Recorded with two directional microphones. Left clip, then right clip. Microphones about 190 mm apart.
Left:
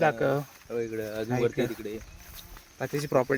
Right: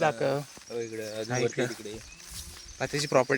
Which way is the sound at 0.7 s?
60° left (ahead or behind).